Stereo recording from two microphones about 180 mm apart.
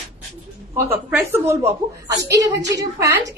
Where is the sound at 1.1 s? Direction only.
10° right (ahead or behind).